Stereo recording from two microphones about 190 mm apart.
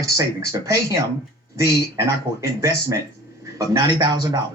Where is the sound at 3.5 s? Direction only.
20° right (ahead or behind).